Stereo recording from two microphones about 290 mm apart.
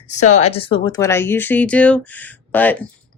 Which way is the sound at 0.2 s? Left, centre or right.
Left.